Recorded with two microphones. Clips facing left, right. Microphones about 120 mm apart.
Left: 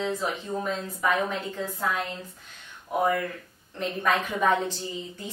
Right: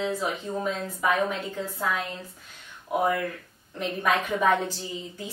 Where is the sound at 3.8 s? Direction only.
5° right (ahead or behind).